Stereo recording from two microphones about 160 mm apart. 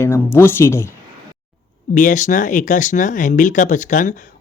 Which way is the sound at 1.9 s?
55° left (ahead or behind).